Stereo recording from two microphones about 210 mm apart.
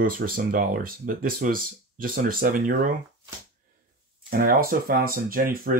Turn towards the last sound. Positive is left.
turn(degrees=-45)  # may be behind; listen again after turning